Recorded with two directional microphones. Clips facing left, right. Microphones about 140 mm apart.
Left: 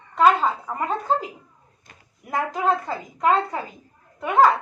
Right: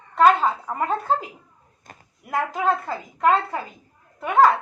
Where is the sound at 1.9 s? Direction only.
50° right (ahead or behind).